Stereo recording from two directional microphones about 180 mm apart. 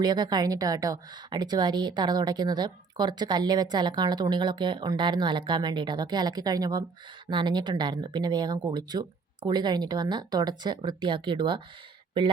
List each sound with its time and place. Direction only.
0.0 s a woman's voice: 20° right (ahead or behind)